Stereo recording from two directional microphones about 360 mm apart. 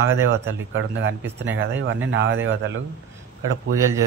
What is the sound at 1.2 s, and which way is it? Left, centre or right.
Speech, centre.